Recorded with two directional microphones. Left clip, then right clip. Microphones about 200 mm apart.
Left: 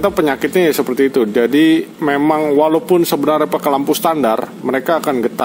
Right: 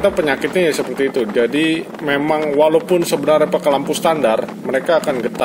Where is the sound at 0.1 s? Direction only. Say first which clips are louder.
Left 2 dB; 55° left (ahead or behind).